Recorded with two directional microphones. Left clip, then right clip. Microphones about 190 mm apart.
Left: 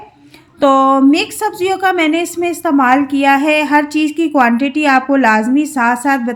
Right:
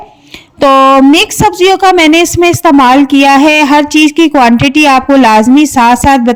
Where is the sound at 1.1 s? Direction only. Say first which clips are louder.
Right 8 dB; 40° right (ahead or behind).